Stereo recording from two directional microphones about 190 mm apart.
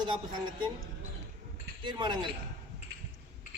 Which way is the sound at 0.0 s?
25° right (ahead or behind).